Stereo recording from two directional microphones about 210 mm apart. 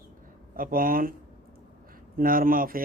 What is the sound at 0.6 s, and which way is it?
Speech, 40° right (ahead or behind).